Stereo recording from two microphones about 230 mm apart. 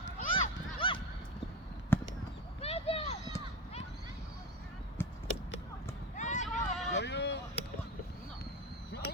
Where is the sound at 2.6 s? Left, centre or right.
Left.